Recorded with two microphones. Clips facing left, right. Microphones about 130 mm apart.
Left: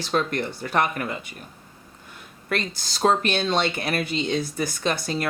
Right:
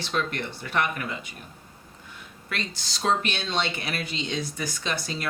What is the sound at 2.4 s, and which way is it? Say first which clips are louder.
Speech: left 6 dB; 45° left (ahead or behind).